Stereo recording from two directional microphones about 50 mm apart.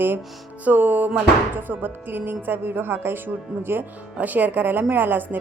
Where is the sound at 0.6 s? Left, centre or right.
Right.